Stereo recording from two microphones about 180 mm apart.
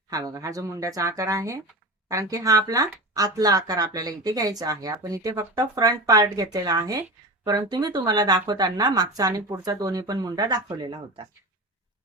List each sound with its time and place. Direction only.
0.1 s speech: 20° right (ahead or behind)